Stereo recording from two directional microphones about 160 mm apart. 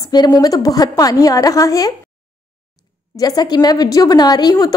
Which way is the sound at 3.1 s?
25° left (ahead or behind).